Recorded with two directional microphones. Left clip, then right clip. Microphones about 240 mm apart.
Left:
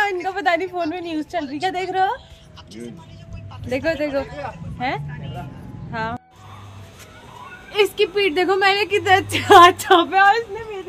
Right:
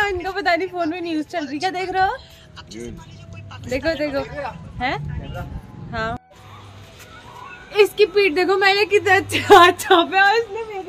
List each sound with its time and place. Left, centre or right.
0.0 s a woman's voice: centre
2.8 s speech: right
3.6 s a woman's voice: centre
7.7 s a woman's voice: centre